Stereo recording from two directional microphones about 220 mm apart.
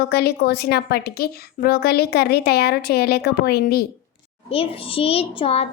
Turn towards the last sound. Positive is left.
turn(degrees=25)  # may be behind; listen again after turning